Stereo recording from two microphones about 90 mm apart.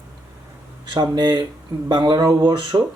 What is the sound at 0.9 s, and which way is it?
Speech, 55° right (ahead or behind).